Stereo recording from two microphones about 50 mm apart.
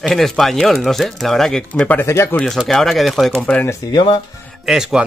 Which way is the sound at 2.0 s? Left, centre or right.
Left.